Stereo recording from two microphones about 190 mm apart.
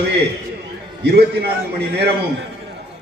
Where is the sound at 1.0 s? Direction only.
60° right (ahead or behind).